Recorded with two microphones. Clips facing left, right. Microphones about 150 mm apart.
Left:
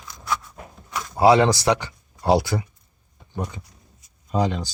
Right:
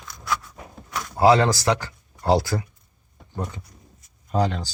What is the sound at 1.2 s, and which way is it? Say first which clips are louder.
Speech: left 1 dB; 15° left (ahead or behind).